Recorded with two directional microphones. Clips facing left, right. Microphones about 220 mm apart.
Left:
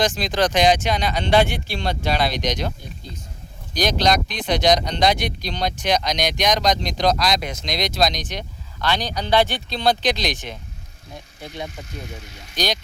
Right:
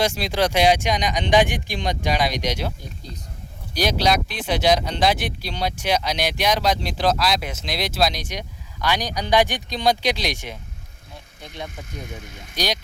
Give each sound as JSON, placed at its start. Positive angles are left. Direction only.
{"t": 0.0, "sound": "speech", "side_deg": -10}
{"t": 3.8, "sound": "speech", "side_deg": -10}
{"t": 11.3, "sound": "speech", "side_deg": 5}
{"t": 12.0, "sound": "speech", "side_deg": -50}
{"t": 12.5, "sound": "speech", "side_deg": -10}